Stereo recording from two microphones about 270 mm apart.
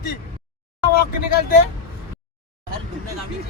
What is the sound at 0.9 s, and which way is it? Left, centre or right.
Speech, left.